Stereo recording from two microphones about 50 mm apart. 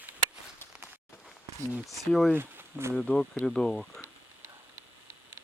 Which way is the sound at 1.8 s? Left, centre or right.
Centre.